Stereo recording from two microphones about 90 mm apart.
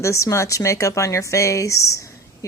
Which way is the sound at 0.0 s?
35° left (ahead or behind).